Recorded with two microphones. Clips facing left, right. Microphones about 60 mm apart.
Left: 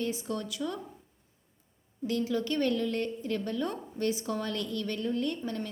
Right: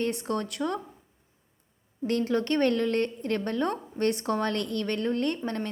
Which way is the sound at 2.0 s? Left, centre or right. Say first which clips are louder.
Right 4 dB; right.